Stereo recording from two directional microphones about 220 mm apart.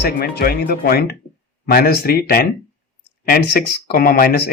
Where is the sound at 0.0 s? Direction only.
45° left (ahead or behind).